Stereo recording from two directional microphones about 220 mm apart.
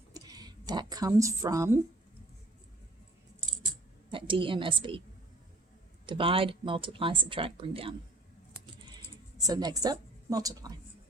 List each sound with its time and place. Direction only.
0.1 s a sound: 15° right (ahead or behind)
4.1 s a woman's voice: 25° right (ahead or behind)
6.1 s speech: 25° right (ahead or behind)
9.4 s a woman's voice: 20° right (ahead or behind)